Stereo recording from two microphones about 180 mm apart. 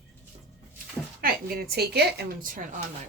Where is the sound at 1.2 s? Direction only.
60° right (ahead or behind).